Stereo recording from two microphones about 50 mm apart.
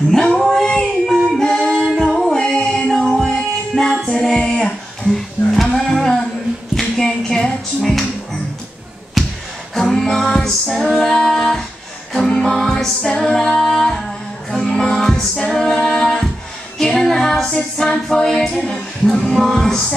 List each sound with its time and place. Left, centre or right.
0.1 s a sound: centre
1.1 s music: centre
1.4 s a capella: centre
2.1 s music: centre
7.1 s a sound: centre
9.2 s a sound: centre
9.9 s music: centre
13.1 s a capella: centre
14.5 s music: centre
16.7 s a capella: centre